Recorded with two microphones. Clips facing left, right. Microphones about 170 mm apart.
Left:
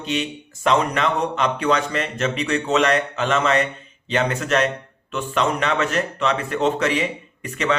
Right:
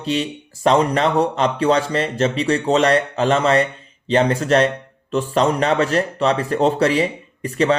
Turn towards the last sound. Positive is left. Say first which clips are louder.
# right 6 dB
turn(degrees=-35)  # may be behind; listen again after turning